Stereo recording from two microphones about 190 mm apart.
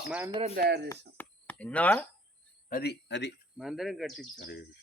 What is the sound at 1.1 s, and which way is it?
Speech, 10° left (ahead or behind).